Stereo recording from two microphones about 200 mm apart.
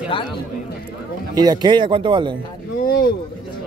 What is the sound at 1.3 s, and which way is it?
Speech, 20° right (ahead or behind).